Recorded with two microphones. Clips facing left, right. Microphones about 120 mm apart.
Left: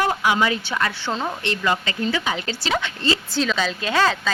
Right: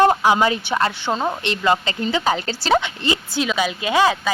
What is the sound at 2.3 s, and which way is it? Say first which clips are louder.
Speech: right 6 dB; 35° right (ahead or behind).